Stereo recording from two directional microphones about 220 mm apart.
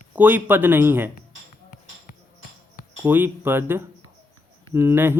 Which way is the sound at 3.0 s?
10° right (ahead or behind).